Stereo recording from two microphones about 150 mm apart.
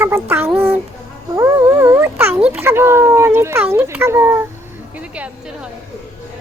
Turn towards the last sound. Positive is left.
turn(degrees=-10)  # may be behind; listen again after turning